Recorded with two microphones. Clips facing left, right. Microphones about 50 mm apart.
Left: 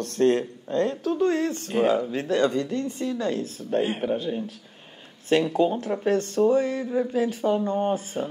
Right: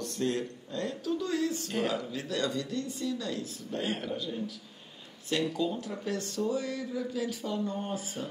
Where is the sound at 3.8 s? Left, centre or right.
Left.